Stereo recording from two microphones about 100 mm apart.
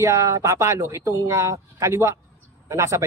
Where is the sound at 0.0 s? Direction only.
30° right (ahead or behind).